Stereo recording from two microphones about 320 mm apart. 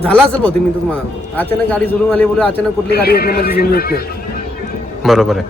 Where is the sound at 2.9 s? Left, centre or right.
Left.